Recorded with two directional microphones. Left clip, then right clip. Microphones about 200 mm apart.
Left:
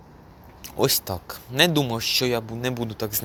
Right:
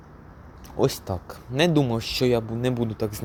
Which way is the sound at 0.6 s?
15° right (ahead or behind).